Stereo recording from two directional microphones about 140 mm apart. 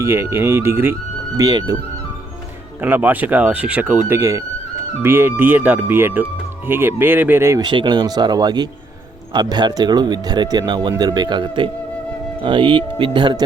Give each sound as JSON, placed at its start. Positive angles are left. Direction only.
{"t": 0.0, "sound": "speech", "side_deg": -20}
{"t": 2.8, "sound": "speech", "side_deg": -10}
{"t": 7.6, "sound": "speech", "side_deg": -35}